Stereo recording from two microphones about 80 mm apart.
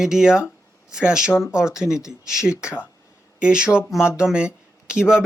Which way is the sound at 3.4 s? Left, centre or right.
Centre.